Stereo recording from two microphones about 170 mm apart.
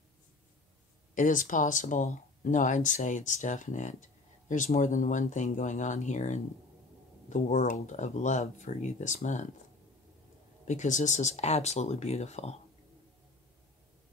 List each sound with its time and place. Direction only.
1.1 s speech: 50° left (ahead or behind)
10.6 s speech: 45° left (ahead or behind)